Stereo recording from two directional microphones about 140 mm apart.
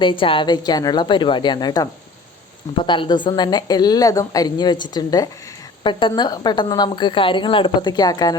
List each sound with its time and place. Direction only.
0.0 s a woman's voice: 35° left (ahead or behind)